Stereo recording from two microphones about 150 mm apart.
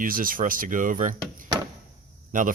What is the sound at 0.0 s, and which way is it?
Speech, 70° right (ahead or behind).